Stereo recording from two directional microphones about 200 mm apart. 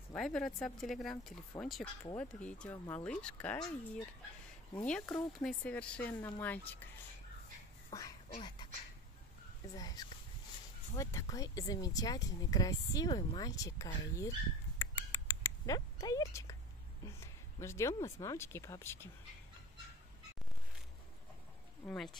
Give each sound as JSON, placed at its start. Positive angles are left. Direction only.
{"t": 0.1, "sound": "speech", "side_deg": 0}
{"t": 7.9, "sound": "a sound", "side_deg": 15}
{"t": 8.4, "sound": "speech", "side_deg": 20}
{"t": 9.8, "sound": "speech", "side_deg": 20}
{"t": 14.8, "sound": "a sound", "side_deg": 15}
{"t": 18.0, "sound": "speech", "side_deg": 15}
{"t": 21.8, "sound": "speech", "side_deg": 0}